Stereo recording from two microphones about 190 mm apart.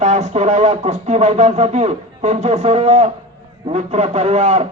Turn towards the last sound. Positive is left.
turn(degrees=-35)  # may be behind; listen again after turning